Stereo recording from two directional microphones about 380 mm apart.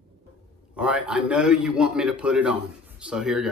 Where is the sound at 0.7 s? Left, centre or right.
Centre.